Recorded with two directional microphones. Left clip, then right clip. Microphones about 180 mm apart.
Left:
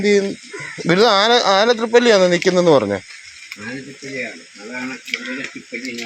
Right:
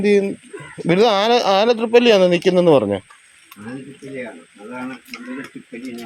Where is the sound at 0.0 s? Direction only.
15° right (ahead or behind).